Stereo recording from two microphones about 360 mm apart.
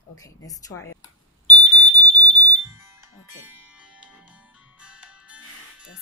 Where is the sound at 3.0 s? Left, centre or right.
Centre.